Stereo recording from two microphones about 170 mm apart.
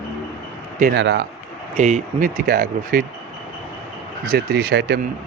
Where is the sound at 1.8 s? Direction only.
45° right (ahead or behind).